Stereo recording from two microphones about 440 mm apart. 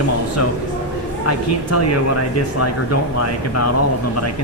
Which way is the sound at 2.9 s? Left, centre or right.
Left.